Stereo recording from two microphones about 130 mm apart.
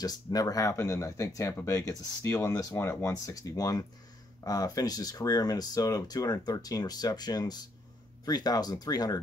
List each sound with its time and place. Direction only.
0.0 s speech: 30° left (ahead or behind)